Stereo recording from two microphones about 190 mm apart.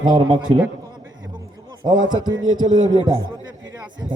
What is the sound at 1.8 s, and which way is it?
Speech, 25° right (ahead or behind).